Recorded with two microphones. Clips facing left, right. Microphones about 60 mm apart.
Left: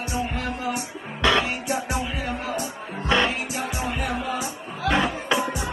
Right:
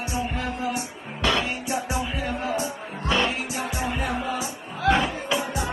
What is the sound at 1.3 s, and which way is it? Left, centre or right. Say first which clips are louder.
Music: left 3 dB; left.